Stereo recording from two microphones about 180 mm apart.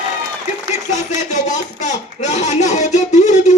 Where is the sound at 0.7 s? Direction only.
40° left (ahead or behind).